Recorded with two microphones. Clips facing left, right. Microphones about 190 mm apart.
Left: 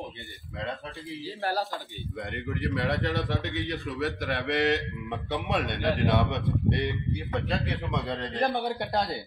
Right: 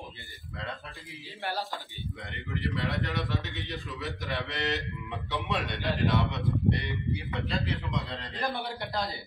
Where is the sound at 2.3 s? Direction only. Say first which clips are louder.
Left 3 dB; 60° left (ahead or behind).